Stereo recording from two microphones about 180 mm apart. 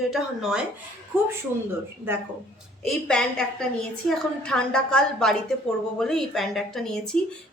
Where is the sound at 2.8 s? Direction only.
5° left (ahead or behind).